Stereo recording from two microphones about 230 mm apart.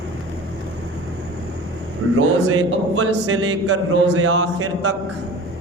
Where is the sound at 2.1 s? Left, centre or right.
Right.